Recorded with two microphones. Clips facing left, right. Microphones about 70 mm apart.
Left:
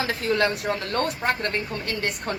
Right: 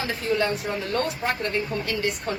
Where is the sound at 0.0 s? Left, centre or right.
Left.